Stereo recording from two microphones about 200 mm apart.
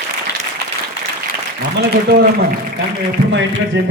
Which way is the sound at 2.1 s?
50° right (ahead or behind).